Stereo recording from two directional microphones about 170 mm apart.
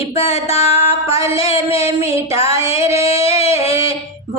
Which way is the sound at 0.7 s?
20° right (ahead or behind).